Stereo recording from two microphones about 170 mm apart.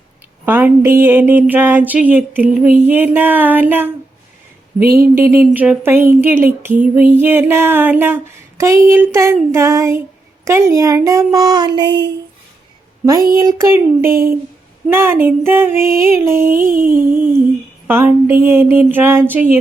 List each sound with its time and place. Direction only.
0.4 s speech: 15° right (ahead or behind)
13.4 s speech: 15° right (ahead or behind)
16.6 s a sound: 55° right (ahead or behind)
16.9 s speech: 10° right (ahead or behind)